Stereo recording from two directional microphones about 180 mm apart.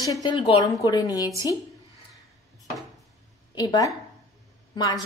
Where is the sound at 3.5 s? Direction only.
20° left (ahead or behind).